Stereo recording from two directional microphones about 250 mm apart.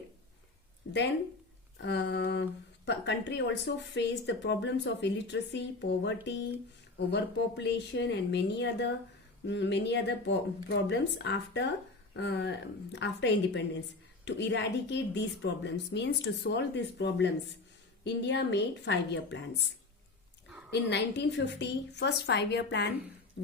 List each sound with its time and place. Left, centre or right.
0.9 s a sound: left
1.8 s speech: left
20.7 s speech: left